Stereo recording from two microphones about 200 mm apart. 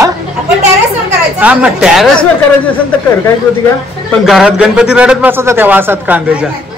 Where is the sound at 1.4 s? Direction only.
5° right (ahead or behind).